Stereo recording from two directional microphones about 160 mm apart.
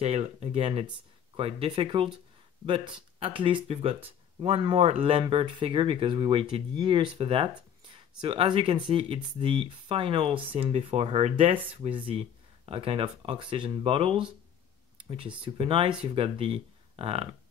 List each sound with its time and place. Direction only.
0.0 s speech: 40° right (ahead or behind)
15.4 s speech: 35° right (ahead or behind)